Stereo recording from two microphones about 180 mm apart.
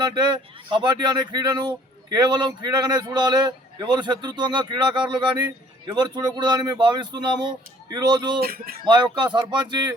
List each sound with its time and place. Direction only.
0.0 s speech: 25° right (ahead or behind)
8.4 s speech: 55° right (ahead or behind)
8.8 s speech: 25° right (ahead or behind)